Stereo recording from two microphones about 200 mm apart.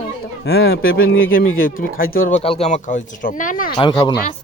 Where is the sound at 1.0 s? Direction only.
80° left.